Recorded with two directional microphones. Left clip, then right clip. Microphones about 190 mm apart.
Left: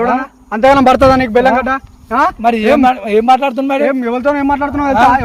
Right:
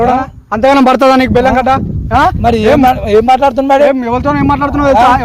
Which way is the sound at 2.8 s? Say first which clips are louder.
Right 3 dB; 15° right (ahead or behind).